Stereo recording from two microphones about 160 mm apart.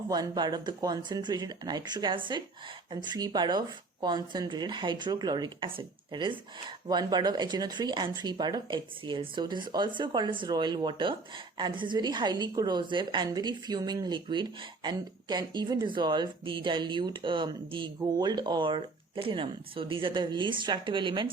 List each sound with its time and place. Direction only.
0.1 s speech: 25° right (ahead or behind)